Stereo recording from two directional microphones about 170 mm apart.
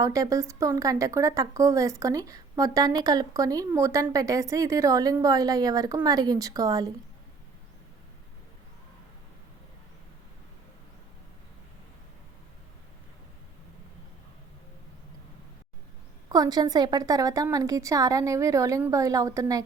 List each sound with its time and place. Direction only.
0.0 s a woman's voice: 20° right (ahead or behind)
16.3 s a woman's voice: 20° right (ahead or behind)